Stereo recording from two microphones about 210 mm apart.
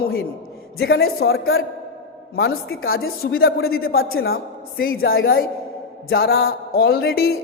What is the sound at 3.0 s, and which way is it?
Speech, 45° left (ahead or behind).